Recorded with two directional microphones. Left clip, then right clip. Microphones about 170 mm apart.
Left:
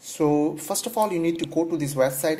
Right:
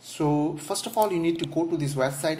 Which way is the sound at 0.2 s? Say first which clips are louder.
Left 4 dB; 25° left (ahead or behind).